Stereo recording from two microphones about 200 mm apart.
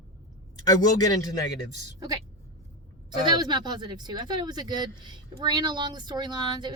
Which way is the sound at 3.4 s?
20° right (ahead or behind).